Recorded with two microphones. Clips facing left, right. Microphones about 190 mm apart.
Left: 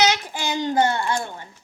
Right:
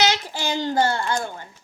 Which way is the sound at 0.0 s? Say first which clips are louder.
Left 1 dB; 15° left (ahead or behind).